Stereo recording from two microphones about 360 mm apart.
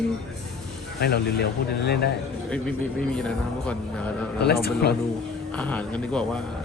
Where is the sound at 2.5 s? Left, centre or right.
Centre.